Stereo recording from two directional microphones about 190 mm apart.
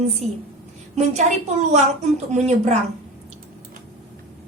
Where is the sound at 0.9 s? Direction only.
40° right (ahead or behind).